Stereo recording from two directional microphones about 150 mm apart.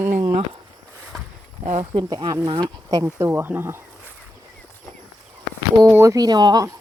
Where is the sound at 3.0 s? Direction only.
15° right (ahead or behind).